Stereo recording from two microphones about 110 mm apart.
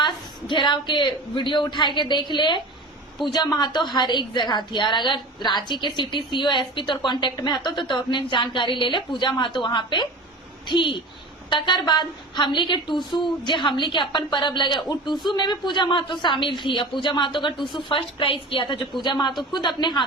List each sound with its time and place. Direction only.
0.0 s a woman's voice: 45° left (ahead or behind)